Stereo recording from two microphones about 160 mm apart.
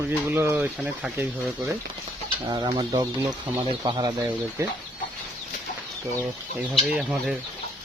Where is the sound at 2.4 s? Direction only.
25° right (ahead or behind).